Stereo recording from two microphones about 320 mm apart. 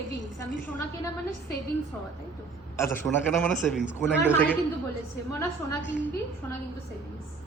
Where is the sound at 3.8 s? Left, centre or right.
Left.